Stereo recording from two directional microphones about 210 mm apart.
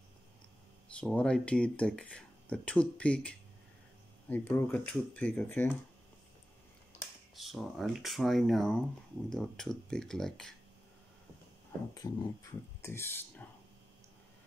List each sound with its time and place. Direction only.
0.9 s speech: 5° left (ahead or behind)
7.3 s speech: centre (ahead or behind)
11.9 s a sound: 20° left (ahead or behind)
12.8 s speech: 10° left (ahead or behind)